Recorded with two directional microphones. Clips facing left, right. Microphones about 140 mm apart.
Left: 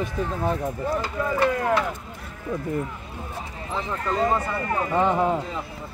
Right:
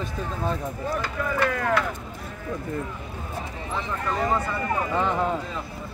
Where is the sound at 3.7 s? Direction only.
20° left (ahead or behind).